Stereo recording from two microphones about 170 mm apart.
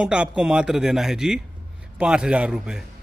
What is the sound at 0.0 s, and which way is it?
Speech, 5° right (ahead or behind).